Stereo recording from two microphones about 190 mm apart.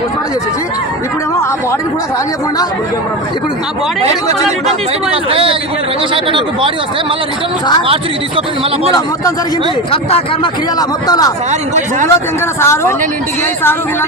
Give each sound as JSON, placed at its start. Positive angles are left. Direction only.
{"t": 5.3, "sound": "speech", "side_deg": -30}
{"t": 9.9, "sound": "speech", "side_deg": 30}
{"t": 10.8, "sound": "speech", "side_deg": 20}
{"t": 12.5, "sound": "speech", "side_deg": 15}